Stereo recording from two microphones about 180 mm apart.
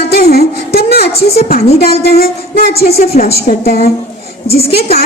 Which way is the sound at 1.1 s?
35° left (ahead or behind).